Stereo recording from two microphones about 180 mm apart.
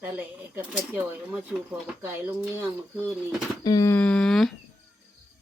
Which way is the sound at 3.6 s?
15° left (ahead or behind).